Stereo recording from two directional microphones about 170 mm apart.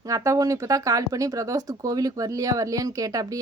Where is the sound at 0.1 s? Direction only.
20° right (ahead or behind).